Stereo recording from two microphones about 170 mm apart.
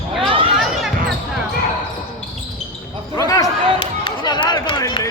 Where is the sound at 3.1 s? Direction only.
20° left (ahead or behind).